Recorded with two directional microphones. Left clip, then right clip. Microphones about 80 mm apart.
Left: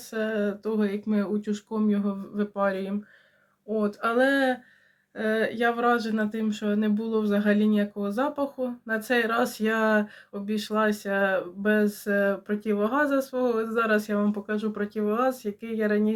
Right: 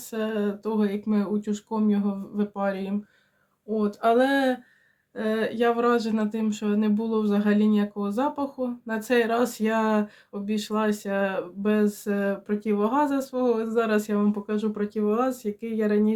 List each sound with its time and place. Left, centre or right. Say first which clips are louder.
0.1 s speech: even; right